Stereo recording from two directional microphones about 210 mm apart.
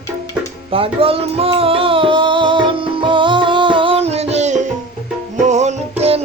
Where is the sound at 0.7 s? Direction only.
25° right (ahead or behind).